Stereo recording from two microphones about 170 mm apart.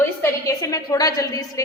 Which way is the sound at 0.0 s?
15° left (ahead or behind).